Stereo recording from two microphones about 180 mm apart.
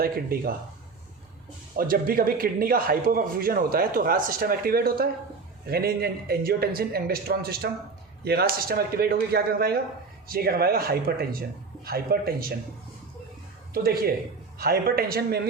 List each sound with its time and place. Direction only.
0.0 s a man's voice: 55° right (ahead or behind)
1.7 s a man's voice: 55° right (ahead or behind)
13.7 s a man's voice: 55° right (ahead or behind)